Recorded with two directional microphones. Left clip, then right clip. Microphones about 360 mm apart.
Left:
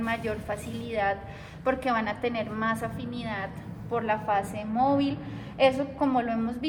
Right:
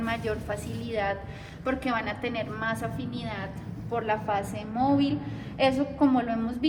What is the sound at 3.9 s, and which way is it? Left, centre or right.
A woman's voice, centre.